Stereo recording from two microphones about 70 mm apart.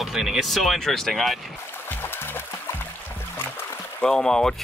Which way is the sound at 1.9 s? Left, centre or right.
Left.